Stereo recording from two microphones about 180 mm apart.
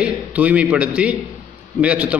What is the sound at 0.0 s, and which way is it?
A man's voice, 5° right (ahead or behind).